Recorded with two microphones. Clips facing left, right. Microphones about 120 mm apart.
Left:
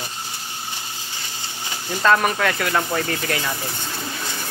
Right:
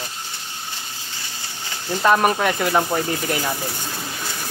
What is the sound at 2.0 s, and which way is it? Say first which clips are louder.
Speech: right 1 dB; 20° right (ahead or behind).